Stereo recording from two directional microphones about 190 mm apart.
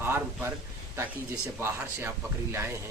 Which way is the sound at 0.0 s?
10° right (ahead or behind).